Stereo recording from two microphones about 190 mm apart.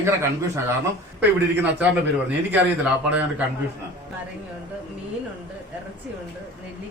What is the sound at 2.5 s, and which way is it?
Speech, 10° right (ahead or behind).